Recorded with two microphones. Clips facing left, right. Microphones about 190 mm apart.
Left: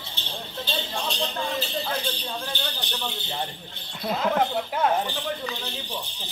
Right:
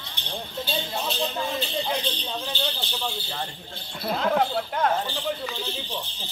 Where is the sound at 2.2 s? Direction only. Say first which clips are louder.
Right 1 dB; 10° right (ahead or behind).